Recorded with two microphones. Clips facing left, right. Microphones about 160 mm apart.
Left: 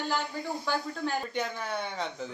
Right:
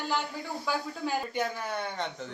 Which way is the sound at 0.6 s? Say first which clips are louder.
Right 1 dB; 5° right (ahead or behind).